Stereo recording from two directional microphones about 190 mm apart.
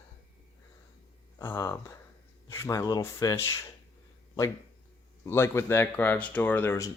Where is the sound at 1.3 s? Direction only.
15° left (ahead or behind).